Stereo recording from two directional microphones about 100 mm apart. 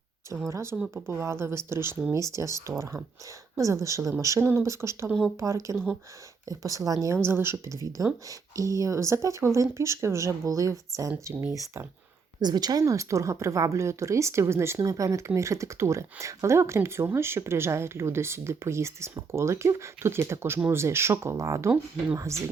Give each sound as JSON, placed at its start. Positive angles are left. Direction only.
{"t": 0.5, "sound": "speech", "side_deg": -25}
{"t": 5.7, "sound": "speech", "side_deg": 5}
{"t": 6.5, "sound": "speech", "side_deg": -35}
{"t": 12.4, "sound": "speech", "side_deg": -40}